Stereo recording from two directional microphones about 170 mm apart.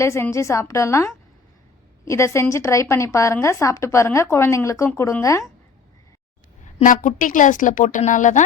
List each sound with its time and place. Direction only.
0.0 s a woman's voice: 15° left (ahead or behind)
6.7 s speech: 50° left (ahead or behind)